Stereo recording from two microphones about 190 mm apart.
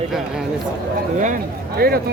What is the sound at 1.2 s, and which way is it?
Speech, 50° right (ahead or behind).